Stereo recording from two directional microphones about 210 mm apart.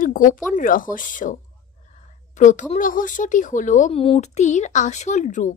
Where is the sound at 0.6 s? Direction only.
40° left (ahead or behind).